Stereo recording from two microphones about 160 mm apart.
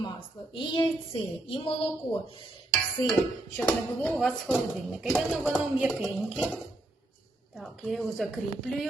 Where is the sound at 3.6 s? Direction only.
10° left (ahead or behind).